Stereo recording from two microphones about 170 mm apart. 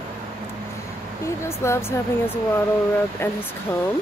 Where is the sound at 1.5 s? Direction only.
15° left (ahead or behind).